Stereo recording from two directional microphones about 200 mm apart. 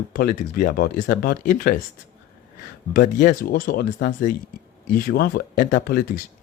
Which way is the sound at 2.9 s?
45° left (ahead or behind).